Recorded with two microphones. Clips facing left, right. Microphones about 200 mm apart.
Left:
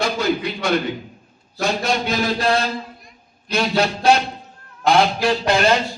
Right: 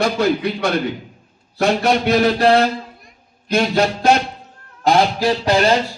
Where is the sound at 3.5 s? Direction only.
50° right (ahead or behind).